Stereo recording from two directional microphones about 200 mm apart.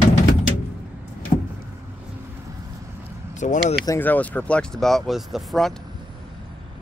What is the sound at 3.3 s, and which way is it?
Speech, 35° left (ahead or behind).